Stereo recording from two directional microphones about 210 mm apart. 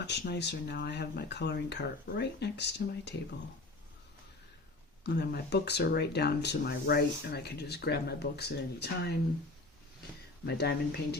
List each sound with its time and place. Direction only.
0.1 s speech: 55° left (ahead or behind)
5.0 s speech: 50° left (ahead or behind)
10.4 s speech: 50° left (ahead or behind)